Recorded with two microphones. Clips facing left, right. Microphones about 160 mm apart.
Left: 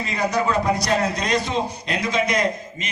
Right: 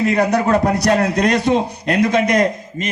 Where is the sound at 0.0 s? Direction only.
60° right (ahead or behind).